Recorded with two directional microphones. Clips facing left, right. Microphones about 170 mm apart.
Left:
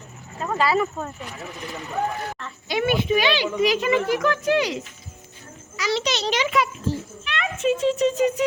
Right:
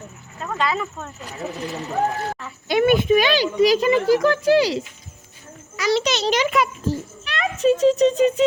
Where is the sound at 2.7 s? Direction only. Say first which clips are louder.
Right 5 dB; 50° right (ahead or behind); by 4.8 s 35° right (ahead or behind).